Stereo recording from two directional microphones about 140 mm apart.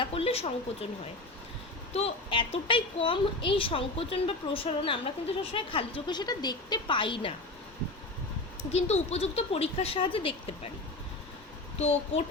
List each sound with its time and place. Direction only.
0.0 s speech: 40° left (ahead or behind)
1.9 s a woman's voice: 45° left (ahead or behind)
8.7 s speech: 50° left (ahead or behind)